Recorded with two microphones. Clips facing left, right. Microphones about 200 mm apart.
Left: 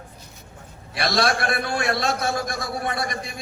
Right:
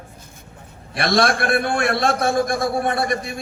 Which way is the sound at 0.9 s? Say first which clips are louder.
Right 4 dB; 55° right (ahead or behind).